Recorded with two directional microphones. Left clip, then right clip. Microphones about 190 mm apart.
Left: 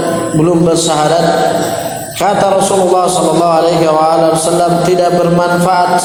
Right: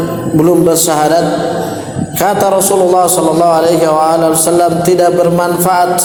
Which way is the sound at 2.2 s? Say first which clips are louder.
Even; 40° right (ahead or behind).